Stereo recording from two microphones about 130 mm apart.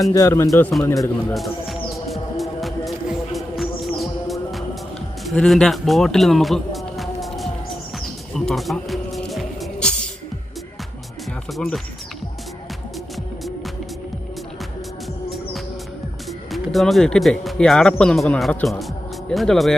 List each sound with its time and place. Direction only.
0.0 s speech: 25° left (ahead or behind)
1.3 s music: centre (ahead or behind)
5.2 s speech: centre (ahead or behind)
8.3 s music: 5° left (ahead or behind)
11.5 s speech: centre (ahead or behind)
16.5 s speech: centre (ahead or behind)